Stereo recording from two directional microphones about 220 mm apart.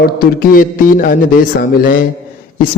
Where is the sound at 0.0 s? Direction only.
45° left (ahead or behind).